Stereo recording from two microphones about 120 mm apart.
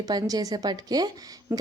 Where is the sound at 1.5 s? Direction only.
15° right (ahead or behind).